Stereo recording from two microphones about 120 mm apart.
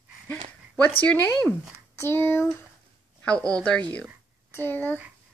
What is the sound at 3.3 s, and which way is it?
A woman's voice, 10° left (ahead or behind).